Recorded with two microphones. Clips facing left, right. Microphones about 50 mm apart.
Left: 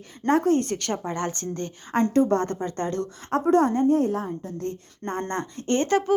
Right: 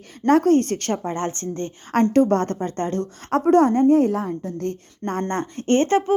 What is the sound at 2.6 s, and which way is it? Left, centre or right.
Speech, right.